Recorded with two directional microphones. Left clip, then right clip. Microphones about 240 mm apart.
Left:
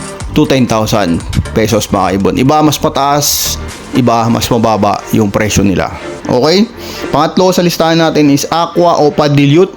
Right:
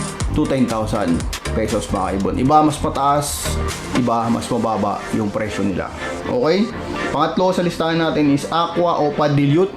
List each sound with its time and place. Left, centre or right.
0.3 s speech: left